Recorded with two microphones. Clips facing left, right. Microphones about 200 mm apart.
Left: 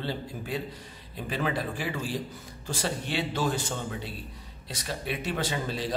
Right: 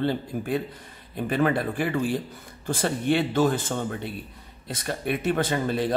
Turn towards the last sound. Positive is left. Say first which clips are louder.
# right 6 dB
turn(degrees=-55)  # may be behind; listen again after turning